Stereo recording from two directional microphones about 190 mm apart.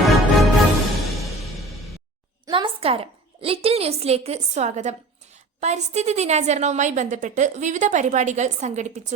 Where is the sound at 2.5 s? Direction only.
25° right (ahead or behind).